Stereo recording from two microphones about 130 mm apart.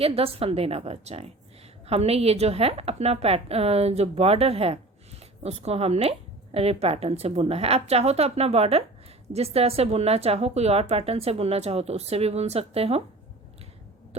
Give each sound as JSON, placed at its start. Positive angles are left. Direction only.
{"t": 0.0, "sound": "speech", "side_deg": -50}